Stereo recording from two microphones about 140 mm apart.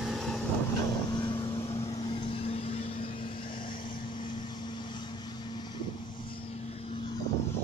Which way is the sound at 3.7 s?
35° left (ahead or behind).